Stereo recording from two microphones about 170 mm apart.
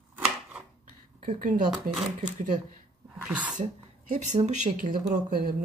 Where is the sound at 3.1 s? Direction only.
10° right (ahead or behind).